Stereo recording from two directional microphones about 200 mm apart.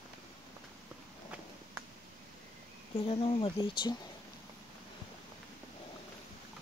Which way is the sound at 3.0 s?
25° left (ahead or behind).